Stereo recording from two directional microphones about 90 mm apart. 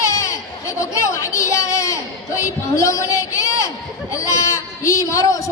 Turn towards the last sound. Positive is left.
turn(degrees=40)  # may be behind; listen again after turning